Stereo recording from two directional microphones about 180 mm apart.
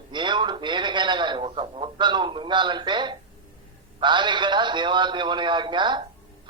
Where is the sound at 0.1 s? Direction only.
25° right (ahead or behind).